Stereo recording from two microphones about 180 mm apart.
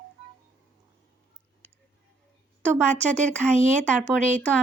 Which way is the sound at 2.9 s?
40° right (ahead or behind).